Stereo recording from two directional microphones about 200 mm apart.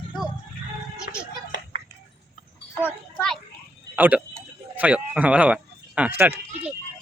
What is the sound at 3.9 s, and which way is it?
Speech, 5° right (ahead or behind).